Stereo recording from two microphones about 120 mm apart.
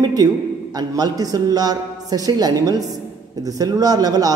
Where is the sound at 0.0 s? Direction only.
35° right (ahead or behind).